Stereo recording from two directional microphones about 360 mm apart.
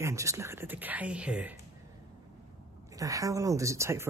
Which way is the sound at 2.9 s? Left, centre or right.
Centre.